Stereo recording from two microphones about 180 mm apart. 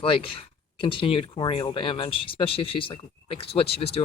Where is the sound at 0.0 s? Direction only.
30° left (ahead or behind).